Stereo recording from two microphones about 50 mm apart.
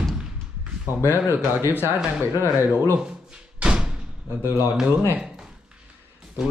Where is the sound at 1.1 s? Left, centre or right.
Right.